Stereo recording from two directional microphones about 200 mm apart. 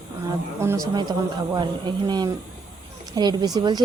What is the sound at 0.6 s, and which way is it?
A man's voice, 15° right (ahead or behind).